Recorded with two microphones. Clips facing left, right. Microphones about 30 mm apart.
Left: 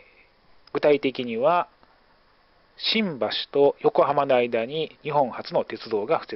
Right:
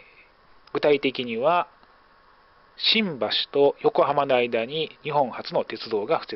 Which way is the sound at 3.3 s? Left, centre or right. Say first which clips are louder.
Even; right.